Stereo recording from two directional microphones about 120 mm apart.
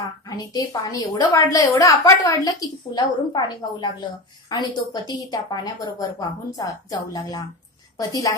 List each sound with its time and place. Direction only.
0.4 s a woman's voice: 30° left (ahead or behind)